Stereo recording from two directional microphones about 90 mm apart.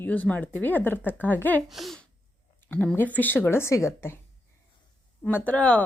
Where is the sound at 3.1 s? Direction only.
20° left (ahead or behind).